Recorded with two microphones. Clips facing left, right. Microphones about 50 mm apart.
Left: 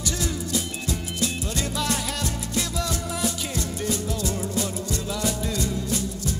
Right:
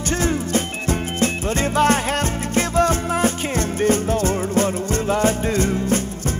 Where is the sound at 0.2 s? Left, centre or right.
Right.